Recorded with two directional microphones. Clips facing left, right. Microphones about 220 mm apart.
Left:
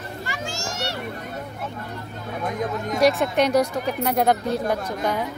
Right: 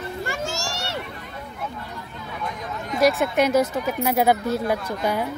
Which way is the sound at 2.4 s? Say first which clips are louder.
Left 7 dB; 45° left (ahead or behind).